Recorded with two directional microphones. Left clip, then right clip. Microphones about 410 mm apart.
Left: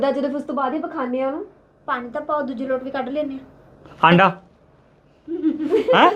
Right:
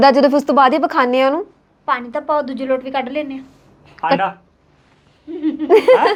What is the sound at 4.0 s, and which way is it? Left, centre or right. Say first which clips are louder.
Speech: left 2 dB; left.